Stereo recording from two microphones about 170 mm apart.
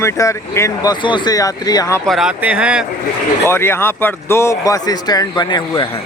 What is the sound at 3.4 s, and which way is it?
A man's voice, 15° left (ahead or behind).